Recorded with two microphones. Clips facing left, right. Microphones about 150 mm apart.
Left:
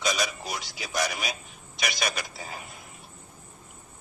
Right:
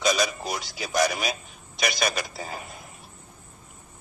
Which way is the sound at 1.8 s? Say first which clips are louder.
Right 4 dB; 40° right (ahead or behind).